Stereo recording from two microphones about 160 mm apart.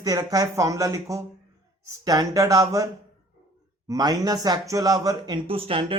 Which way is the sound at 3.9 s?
20° right (ahead or behind).